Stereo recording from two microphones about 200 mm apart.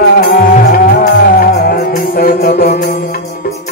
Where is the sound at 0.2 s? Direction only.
45° left (ahead or behind).